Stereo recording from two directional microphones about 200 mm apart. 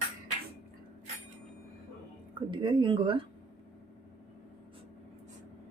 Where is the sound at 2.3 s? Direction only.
25° right (ahead or behind).